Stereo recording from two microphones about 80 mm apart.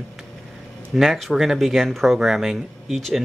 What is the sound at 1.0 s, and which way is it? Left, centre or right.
Speech, centre.